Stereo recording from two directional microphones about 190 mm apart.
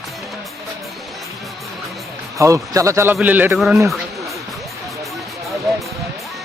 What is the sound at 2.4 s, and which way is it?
A man's voice, 15° right (ahead or behind).